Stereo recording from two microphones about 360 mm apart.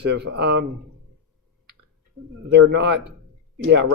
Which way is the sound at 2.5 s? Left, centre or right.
Right.